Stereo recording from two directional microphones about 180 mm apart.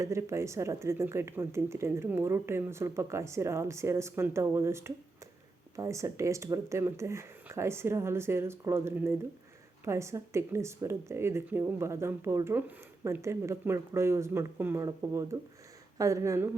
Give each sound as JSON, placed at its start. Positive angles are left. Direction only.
{"t": 0.0, "sound": "speech", "side_deg": -15}